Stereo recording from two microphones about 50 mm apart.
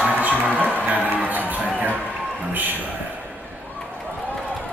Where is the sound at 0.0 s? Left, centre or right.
Right.